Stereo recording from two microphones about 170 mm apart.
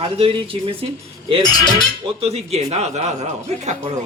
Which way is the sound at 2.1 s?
35° right (ahead or behind).